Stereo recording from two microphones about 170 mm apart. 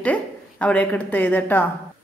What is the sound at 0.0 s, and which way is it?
A woman's voice, 5° left (ahead or behind).